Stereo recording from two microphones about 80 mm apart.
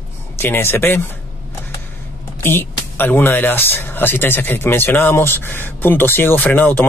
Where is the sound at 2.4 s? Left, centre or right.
Left.